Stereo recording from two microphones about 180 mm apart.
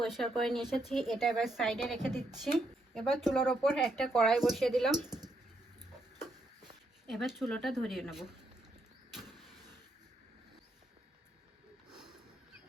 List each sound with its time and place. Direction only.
0.0 s speech: centre (ahead or behind)
7.1 s speech: centre (ahead or behind)
9.1 s vehicle: centre (ahead or behind)
11.9 s a sound: 5° right (ahead or behind)